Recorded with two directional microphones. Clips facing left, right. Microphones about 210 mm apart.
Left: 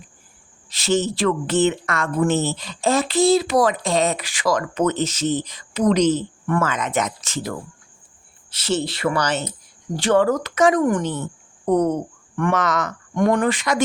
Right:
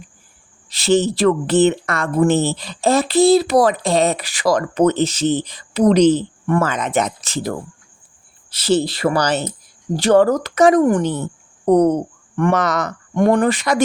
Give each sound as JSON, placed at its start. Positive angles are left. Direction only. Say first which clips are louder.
{"t": 0.7, "sound": "speech", "louder": "right 5 dB", "side_deg": -35}
{"t": 8.5, "sound": "speech", "louder": "right 6 dB", "side_deg": -35}